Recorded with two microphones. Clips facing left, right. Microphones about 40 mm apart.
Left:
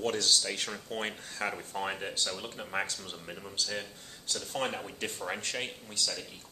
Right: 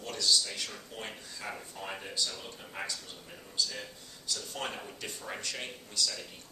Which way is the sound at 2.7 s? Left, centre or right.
Left.